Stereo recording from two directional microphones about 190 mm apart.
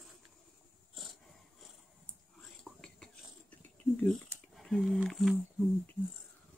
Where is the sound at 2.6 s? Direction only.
5° left (ahead or behind).